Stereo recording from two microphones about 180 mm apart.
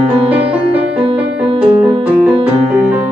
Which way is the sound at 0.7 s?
35° right (ahead or behind).